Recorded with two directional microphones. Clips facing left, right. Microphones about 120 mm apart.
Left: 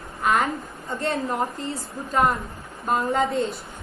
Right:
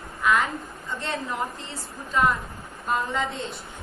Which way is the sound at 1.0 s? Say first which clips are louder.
Left 5 dB; 50° left (ahead or behind).